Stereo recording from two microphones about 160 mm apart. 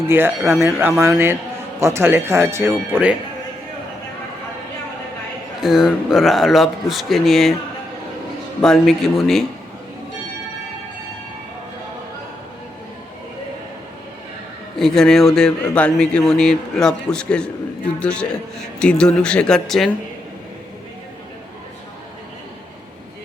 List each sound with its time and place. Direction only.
0.1 s speech: 15° right (ahead or behind)
5.5 s speech: centre (ahead or behind)
8.6 s speech: centre (ahead or behind)
14.8 s speech: centre (ahead or behind)